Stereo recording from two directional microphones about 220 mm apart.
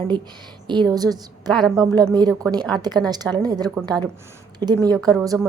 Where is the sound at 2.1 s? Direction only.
15° right (ahead or behind).